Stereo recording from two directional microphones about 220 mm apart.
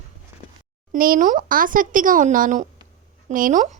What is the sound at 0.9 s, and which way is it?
Speech, 40° right (ahead or behind).